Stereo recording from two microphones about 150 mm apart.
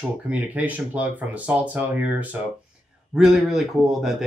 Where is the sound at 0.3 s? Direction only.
10° right (ahead or behind).